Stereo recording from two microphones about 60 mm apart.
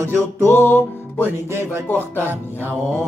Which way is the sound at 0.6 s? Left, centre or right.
Left.